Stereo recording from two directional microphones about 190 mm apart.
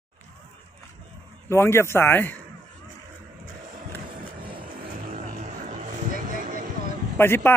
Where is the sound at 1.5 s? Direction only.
15° left (ahead or behind).